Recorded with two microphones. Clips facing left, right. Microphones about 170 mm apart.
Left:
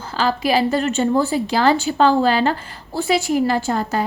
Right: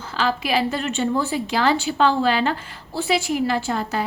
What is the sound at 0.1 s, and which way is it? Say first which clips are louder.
A woman's voice: left 4 dB; 40° left (ahead or behind).